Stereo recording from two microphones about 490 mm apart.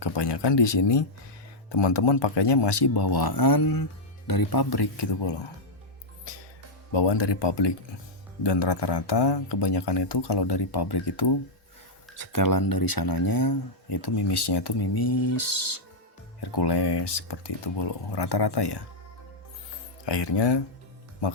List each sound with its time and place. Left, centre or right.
0.0 s speech: left
6.3 s music: left
6.9 s speech: left
12.1 s speech: left
16.4 s speech: left
20.1 s speech: left